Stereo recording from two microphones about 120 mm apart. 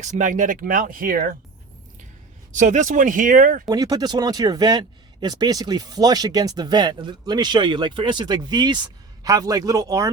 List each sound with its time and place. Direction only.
0.0 s speech: 85° right
2.5 s speech: 90° right
3.7 s speech: 35° right (ahead or behind)